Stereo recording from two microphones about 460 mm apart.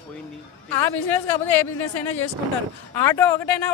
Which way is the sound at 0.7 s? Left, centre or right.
Left.